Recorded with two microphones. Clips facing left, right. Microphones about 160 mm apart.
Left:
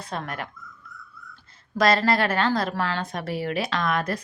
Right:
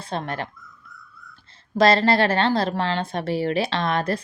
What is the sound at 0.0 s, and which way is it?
Speech, 30° right (ahead or behind).